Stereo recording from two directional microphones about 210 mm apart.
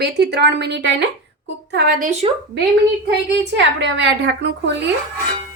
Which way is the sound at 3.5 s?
55° right (ahead or behind).